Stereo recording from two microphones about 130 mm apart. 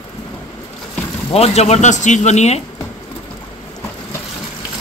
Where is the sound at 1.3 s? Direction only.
55° left (ahead or behind).